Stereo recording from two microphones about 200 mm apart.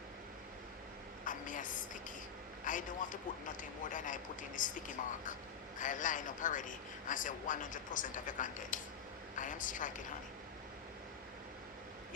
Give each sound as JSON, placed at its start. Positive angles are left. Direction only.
{"t": 1.2, "sound": "a woman's voice", "side_deg": 40}